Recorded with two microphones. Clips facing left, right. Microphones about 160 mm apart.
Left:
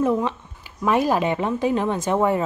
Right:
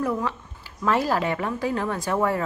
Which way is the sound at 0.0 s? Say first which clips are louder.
Left 5 dB; 20° left (ahead or behind).